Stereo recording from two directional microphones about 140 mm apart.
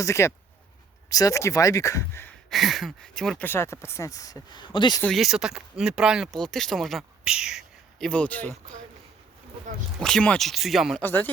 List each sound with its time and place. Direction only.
0.0 s speech: 20° left (ahead or behind)
2.5 s speech: centre (ahead or behind); by 4.9 s 35° left (ahead or behind)
5.0 s speech: centre (ahead or behind)
10.0 s speech: 5° left (ahead or behind)
11.0 s speech: 15° left (ahead or behind)